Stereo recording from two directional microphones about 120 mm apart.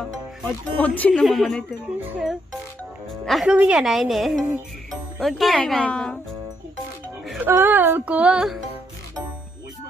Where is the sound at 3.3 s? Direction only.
Centre (ahead or behind).